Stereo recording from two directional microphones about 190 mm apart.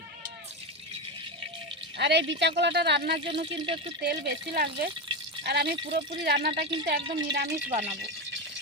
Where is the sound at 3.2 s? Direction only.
25° right (ahead or behind).